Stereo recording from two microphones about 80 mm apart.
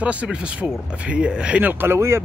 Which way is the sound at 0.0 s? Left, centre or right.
Centre.